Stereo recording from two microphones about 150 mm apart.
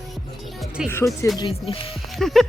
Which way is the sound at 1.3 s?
35° left (ahead or behind).